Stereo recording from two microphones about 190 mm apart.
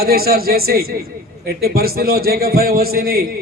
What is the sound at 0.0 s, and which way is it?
A man's voice, 55° right (ahead or behind).